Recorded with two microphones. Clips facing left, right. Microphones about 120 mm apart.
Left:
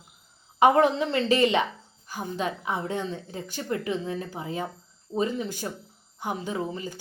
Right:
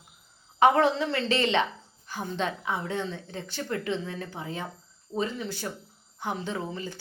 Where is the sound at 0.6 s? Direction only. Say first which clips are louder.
Left 2 dB; 15° left (ahead or behind).